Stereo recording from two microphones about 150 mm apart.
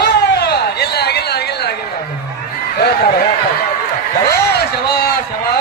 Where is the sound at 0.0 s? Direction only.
90° left.